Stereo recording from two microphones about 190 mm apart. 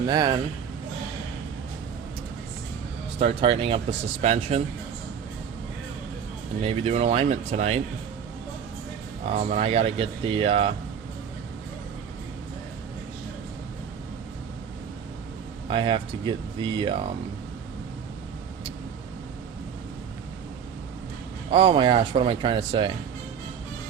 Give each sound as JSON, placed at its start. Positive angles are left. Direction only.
{"t": 0.1, "sound": "speech", "side_deg": -20}
{"t": 3.2, "sound": "speech", "side_deg": -30}
{"t": 6.6, "sound": "speech", "side_deg": -30}
{"t": 9.2, "sound": "speech", "side_deg": -35}
{"t": 15.7, "sound": "speech", "side_deg": -25}
{"t": 21.5, "sound": "speech", "side_deg": -25}